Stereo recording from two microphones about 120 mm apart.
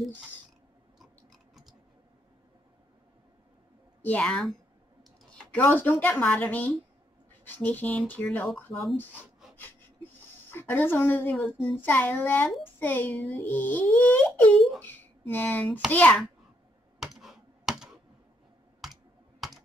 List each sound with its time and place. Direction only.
0.9 s a sound: centre (ahead or behind)
4.0 s a child's voice: 10° left (ahead or behind)
5.6 s a child's voice: 15° left (ahead or behind)
8.5 s speech: centre (ahead or behind)
8.9 s a sound: 15° left (ahead or behind)
11.7 s a child's voice: 15° left (ahead or behind)
17.0 s computer keyboard: centre (ahead or behind)